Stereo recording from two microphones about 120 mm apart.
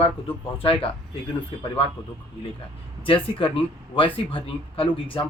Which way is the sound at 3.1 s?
45° left (ahead or behind).